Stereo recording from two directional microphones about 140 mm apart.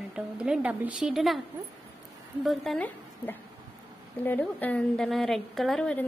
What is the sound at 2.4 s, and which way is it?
Speech, centre (ahead or behind).